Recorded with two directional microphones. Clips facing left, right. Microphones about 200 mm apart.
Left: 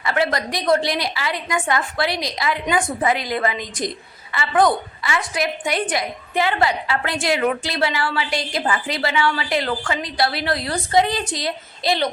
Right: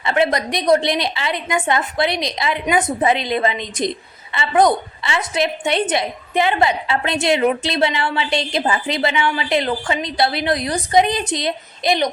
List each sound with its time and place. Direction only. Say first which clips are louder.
0.0 s a woman's voice: right 3 dB; 20° right (ahead or behind)